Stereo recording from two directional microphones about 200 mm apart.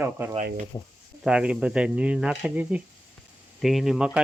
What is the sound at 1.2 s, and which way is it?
Speech, 5° right (ahead or behind).